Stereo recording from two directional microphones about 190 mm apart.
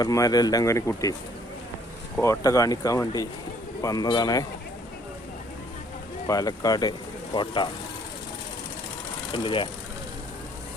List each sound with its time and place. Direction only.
0.0 s speech: 20° left (ahead or behind)
2.1 s speech: 15° left (ahead or behind)
6.2 s speech: 20° left (ahead or behind)
9.3 s speech: 25° left (ahead or behind)